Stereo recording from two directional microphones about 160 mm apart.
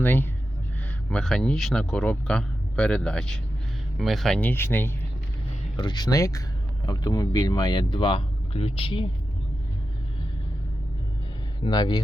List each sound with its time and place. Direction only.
0.0 s speech: 10° left (ahead or behind)
5.7 s speech: 25° left (ahead or behind)
11.6 s speech: 25° left (ahead or behind)